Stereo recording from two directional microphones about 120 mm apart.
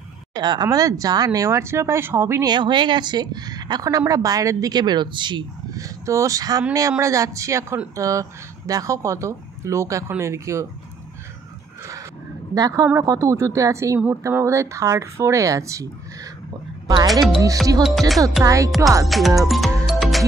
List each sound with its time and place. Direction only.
0.3 s speech: 35° right (ahead or behind); by 2.4 s 20° right (ahead or behind)
2.4 s a woman's voice: 40° right (ahead or behind)
12.5 s speech: 30° right (ahead or behind)
17.1 s speech: centre (ahead or behind)
18.4 s speech: 25° right (ahead or behind)
19.0 s speech: centre (ahead or behind)
19.4 s music: centre (ahead or behind)